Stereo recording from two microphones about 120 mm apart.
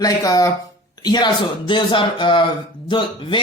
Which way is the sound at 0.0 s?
30° left (ahead or behind).